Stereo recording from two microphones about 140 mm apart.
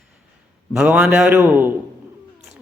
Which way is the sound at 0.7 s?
10° right (ahead or behind).